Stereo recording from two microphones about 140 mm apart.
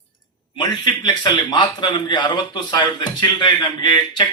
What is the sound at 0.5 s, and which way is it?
A man's voice, 30° left (ahead or behind).